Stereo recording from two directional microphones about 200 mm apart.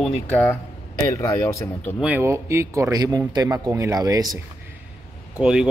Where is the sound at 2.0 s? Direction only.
10° right (ahead or behind).